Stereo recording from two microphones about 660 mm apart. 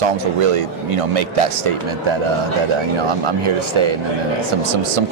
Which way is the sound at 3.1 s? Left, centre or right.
Right.